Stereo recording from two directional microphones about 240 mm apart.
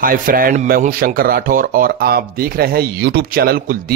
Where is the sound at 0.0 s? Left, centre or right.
Right.